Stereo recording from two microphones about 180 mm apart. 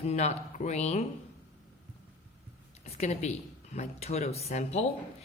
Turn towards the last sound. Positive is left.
turn(degrees=35)  # may be behind; listen again after turning